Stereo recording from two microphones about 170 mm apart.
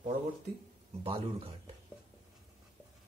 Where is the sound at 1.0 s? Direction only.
35° right (ahead or behind).